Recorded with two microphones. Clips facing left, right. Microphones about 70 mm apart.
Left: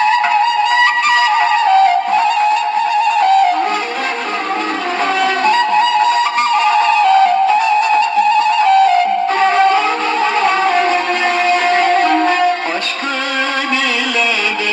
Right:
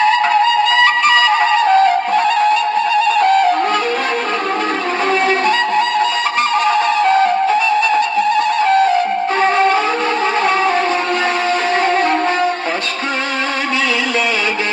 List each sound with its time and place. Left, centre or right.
0.1 s flute: left
1.6 s music: right
3.1 s music: right
6.8 s music: right
7.8 s music: left
8.6 s music: right
11.8 s music: right